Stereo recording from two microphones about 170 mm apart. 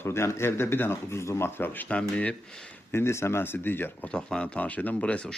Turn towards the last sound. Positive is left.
turn(degrees=5)  # may be behind; listen again after turning